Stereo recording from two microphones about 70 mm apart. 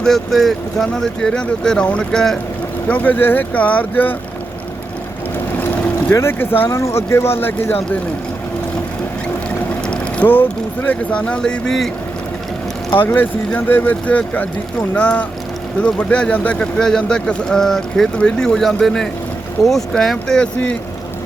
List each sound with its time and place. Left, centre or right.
0.0 s speech: centre
2.9 s speech: left
5.5 s boat: left
6.1 s speech: left
6.7 s speech: left
10.2 s speech: left; by 11.9 s centre
13.1 s speech: left; by 20.5 s centre